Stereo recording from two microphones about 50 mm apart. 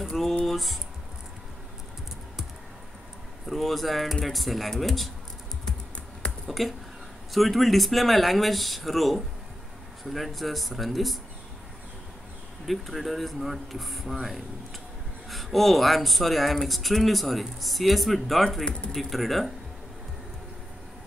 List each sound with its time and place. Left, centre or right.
0.0 s typing: centre
3.4 s speech: centre
6.2 s a sound: centre
7.3 s speech: centre
12.6 s speech: centre
15.2 s speech: centre
18.7 s speech: centre
18.9 s speech: centre